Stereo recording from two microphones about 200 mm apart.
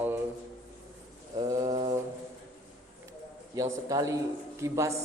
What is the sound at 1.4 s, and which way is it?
Pigeon, 20° right (ahead or behind).